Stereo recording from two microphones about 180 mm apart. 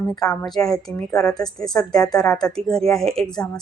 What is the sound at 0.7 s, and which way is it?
Speech, centre (ahead or behind).